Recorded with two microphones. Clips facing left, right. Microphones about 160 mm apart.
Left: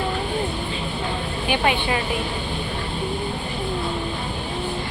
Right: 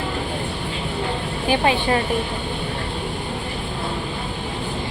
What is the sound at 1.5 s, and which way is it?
Speech, 35° right (ahead or behind).